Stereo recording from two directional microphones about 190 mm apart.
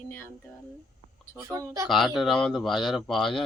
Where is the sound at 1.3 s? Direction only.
15° right (ahead or behind).